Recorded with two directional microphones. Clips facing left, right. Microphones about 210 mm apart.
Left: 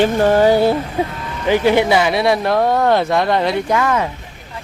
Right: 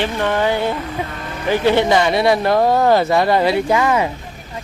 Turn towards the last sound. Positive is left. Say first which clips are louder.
# right 1 dB
turn(degrees=-10)  # may be behind; listen again after turning